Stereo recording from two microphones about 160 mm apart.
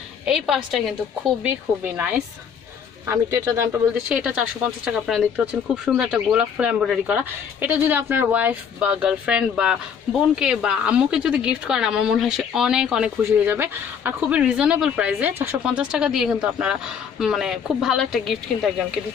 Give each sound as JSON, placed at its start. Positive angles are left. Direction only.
{"t": 0.2, "sound": "a woman's voice", "side_deg": 0}
{"t": 6.3, "sound": "a woman's voice", "side_deg": -5}